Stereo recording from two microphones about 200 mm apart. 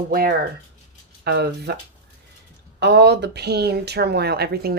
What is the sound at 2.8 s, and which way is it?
Speech, 55° right (ahead or behind).